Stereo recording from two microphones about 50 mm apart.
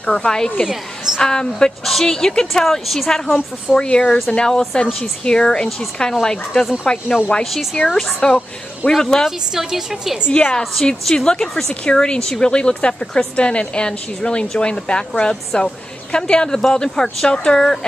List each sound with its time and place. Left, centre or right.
0.0 s a woman's voice: centre
0.7 s a woman's voice: centre
1.2 s a woman's voice: centre
3.8 s a woman's voice: centre
9.5 s a woman's voice: centre
10.3 s a woman's voice: left
10.6 s a woman's voice: centre
11.1 s a woman's voice: centre